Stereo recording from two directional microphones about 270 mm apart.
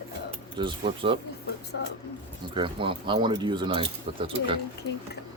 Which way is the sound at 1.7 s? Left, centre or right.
Left.